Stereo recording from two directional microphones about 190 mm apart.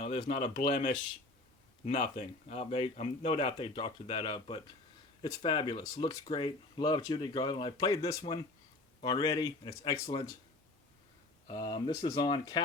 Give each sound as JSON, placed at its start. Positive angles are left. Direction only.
{"t": 0.0, "sound": "a man's voice", "side_deg": 35}
{"t": 9.4, "sound": "speech", "side_deg": 15}
{"t": 11.4, "sound": "speech", "side_deg": 25}